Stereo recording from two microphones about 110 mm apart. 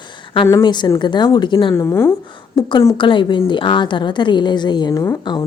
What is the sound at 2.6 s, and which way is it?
Speech, 45° left (ahead or behind).